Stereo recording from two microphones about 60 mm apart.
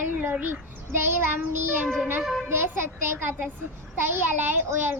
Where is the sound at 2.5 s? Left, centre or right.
Right.